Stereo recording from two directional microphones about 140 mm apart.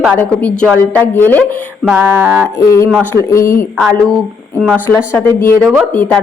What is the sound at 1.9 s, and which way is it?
Music, 15° right (ahead or behind).